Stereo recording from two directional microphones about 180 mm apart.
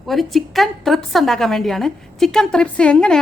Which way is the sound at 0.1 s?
Centre (ahead or behind).